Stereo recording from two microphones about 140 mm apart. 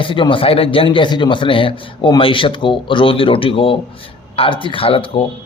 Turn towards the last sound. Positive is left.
turn(degrees=40)  # may be behind; listen again after turning